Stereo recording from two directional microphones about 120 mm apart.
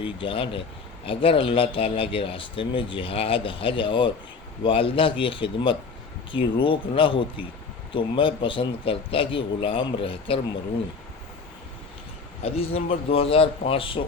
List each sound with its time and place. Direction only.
0.0 s speech: 45° left (ahead or behind)
12.4 s speech: 55° left (ahead or behind)